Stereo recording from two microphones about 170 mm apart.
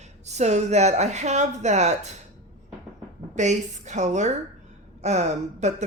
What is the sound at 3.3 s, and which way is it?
Speech, 45° right (ahead or behind).